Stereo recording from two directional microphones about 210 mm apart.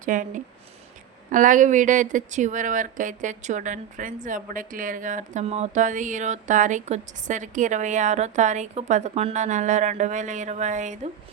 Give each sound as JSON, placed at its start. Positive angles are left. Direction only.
{"t": 0.0, "sound": "speech", "side_deg": -40}